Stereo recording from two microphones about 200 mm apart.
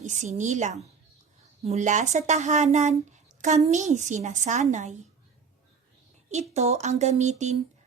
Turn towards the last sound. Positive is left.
turn(degrees=-35)  # may be behind; listen again after turning